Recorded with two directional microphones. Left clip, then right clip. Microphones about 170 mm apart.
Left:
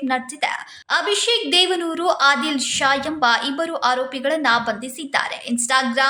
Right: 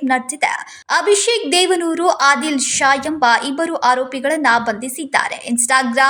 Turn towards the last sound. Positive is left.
turn(degrees=-20)  # may be behind; listen again after turning